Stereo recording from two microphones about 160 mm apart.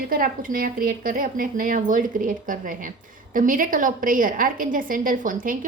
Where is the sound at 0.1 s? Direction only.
65° right (ahead or behind).